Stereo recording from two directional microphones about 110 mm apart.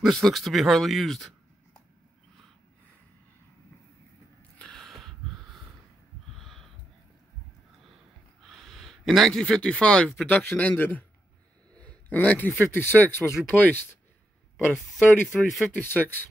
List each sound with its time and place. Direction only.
0.0 s speech: centre (ahead or behind)
4.6 s a sound: 5° left (ahead or behind)
8.5 s speech: centre (ahead or behind)
10.3 s a man's voice: 15° left (ahead or behind)
11.7 s a sound: 10° left (ahead or behind)
12.7 s a man's voice: 15° left (ahead or behind)
14.7 s speech: 5° right (ahead or behind)
15.7 s a man's voice: 15° left (ahead or behind)